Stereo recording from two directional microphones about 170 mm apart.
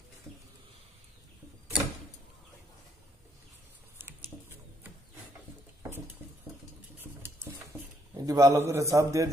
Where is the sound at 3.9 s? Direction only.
15° right (ahead or behind).